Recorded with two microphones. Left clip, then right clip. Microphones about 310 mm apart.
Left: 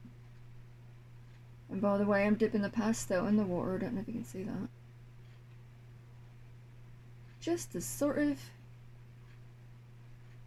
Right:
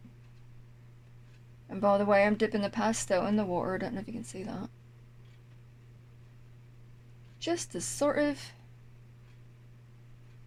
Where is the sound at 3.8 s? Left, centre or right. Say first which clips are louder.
Right 2 dB; right.